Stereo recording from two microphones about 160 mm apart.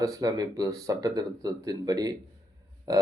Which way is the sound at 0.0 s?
20° right (ahead or behind).